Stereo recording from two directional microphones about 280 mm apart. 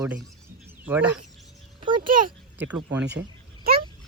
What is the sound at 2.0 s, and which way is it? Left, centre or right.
Speech, right.